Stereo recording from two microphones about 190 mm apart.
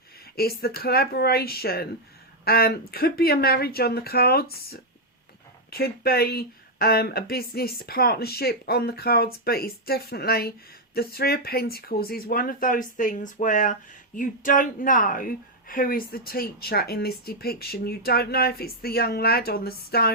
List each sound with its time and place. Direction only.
0.3 s speech: 55° left (ahead or behind)